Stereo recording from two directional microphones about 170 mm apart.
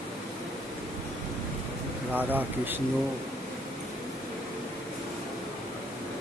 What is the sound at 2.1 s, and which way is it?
Speech, 10° right (ahead or behind).